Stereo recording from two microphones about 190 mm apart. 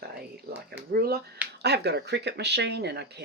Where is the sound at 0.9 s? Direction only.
55° right (ahead or behind).